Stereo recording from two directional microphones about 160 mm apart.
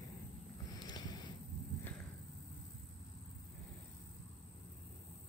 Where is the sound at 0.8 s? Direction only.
25° left (ahead or behind).